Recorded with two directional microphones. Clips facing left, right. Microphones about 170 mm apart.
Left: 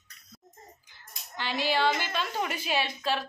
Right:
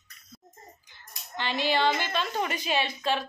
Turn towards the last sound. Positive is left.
turn(degrees=5)  # may be behind; listen again after turning